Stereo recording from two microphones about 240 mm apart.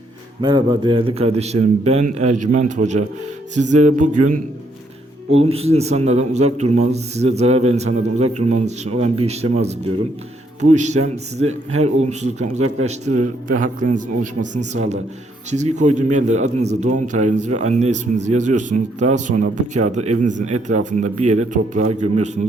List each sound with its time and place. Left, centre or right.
0.4 s a man's voice: centre
5.4 s a man's voice: right